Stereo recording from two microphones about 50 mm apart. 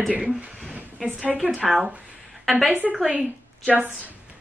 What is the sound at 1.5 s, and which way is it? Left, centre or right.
Speech, centre.